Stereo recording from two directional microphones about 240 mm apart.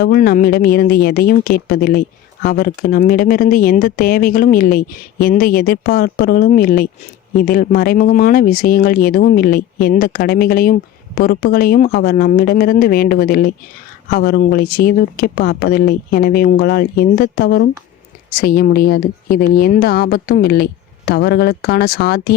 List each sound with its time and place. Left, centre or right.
0.0 s a woman's voice: left